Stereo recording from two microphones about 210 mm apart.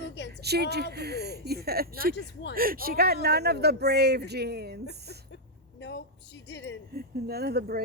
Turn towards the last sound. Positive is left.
turn(degrees=-50)  # may be behind; listen again after turning